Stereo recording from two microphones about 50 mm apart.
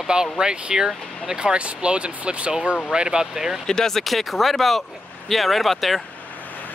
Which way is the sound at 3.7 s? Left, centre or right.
Centre.